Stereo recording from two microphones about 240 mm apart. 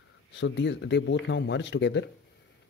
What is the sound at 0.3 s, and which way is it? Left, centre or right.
Speech, left.